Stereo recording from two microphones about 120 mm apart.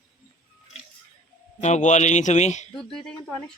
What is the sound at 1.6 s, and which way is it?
A man's voice, 75° left (ahead or behind).